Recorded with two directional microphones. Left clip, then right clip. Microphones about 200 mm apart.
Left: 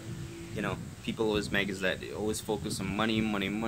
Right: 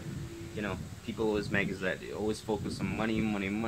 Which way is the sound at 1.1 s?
5° left (ahead or behind).